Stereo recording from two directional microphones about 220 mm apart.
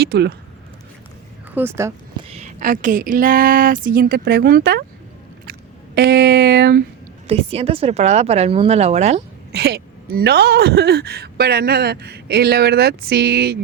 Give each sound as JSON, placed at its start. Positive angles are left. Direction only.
{"t": 0.0, "sound": "speech", "side_deg": -45}
{"t": 1.5, "sound": "speech", "side_deg": -10}
{"t": 2.3, "sound": "speech", "side_deg": -35}
{"t": 7.3, "sound": "speech", "side_deg": -25}
{"t": 9.5, "sound": "speech", "side_deg": -45}